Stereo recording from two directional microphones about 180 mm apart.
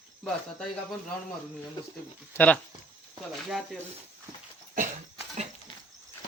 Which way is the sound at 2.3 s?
10° left (ahead or behind).